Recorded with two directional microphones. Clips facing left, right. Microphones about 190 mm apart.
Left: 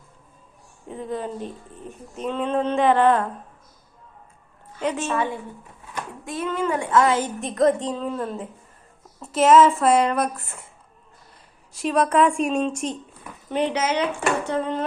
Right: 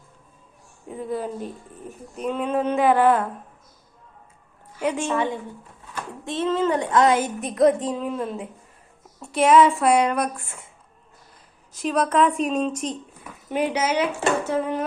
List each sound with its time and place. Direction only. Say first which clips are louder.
0.9 s speech: right 1 dB; 5° right (ahead or behind)
4.8 s speech: right 1 dB; 10° right (ahead or behind)
6.2 s speech: right 3 dB; 25° right (ahead or behind)
6.8 s speech: left 1 dB; 15° right (ahead or behind)
7.4 s speech: right 1 dB; centre (ahead or behind)
11.8 s speech: left 1 dB; centre (ahead or behind)